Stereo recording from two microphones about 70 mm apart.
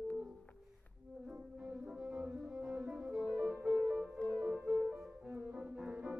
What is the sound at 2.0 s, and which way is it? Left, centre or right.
Music, centre.